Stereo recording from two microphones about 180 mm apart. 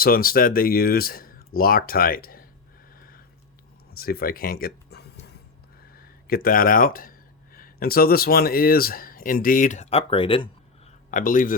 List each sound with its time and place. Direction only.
0.0 s speech: 55° left (ahead or behind)
3.9 s a sound: 55° left (ahead or behind)
5.9 s speech: 55° left (ahead or behind); by 10.5 s 30° left (ahead or behind)
11.1 s speech: 50° left (ahead or behind)